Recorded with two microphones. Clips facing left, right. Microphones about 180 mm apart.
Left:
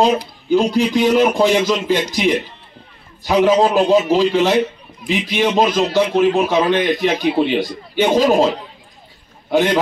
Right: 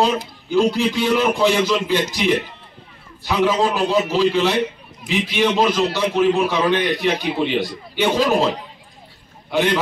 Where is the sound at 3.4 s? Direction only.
45° left (ahead or behind).